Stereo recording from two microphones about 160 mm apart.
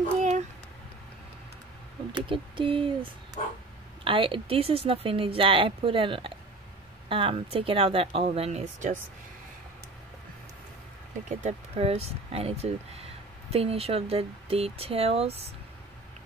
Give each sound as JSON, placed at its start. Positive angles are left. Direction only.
{"t": 0.2, "sound": "a sound", "side_deg": -45}
{"t": 2.1, "sound": "speech", "side_deg": -30}
{"t": 3.4, "sound": "dog", "side_deg": 40}
{"t": 4.0, "sound": "speech", "side_deg": -30}
{"t": 11.4, "sound": "speech", "side_deg": -40}